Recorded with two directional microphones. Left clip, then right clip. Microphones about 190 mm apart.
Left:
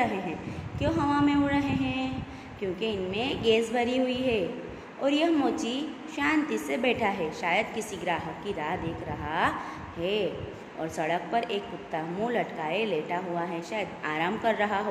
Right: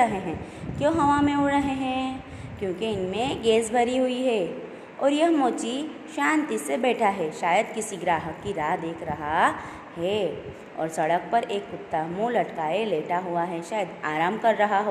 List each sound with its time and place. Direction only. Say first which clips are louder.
0.7 s a woman's voice: right 5 dB; 20° right (ahead or behind)